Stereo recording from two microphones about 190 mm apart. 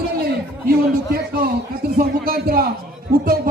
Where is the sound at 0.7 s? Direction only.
50° right (ahead or behind).